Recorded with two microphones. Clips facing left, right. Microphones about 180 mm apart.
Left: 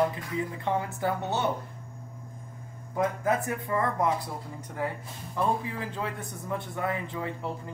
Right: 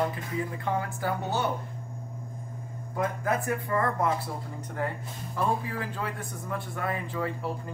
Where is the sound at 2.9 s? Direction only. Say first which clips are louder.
Left 2 dB; 20° left (ahead or behind).